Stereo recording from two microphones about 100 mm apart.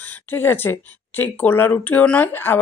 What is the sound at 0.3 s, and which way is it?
Speech, 20° left (ahead or behind).